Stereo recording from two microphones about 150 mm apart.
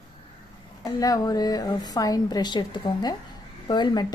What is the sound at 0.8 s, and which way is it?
A woman's voice, 25° left (ahead or behind).